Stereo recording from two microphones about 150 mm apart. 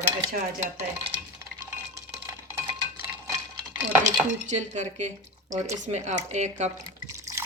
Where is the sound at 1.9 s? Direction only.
20° right (ahead or behind).